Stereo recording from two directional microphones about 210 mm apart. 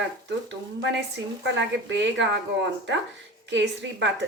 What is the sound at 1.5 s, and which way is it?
Speech, 60° right (ahead or behind).